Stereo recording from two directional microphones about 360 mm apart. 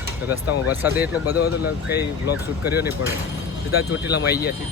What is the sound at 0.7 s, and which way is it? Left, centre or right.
Speech, centre.